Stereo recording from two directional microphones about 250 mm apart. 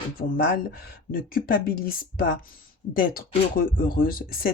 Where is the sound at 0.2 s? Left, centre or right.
Left.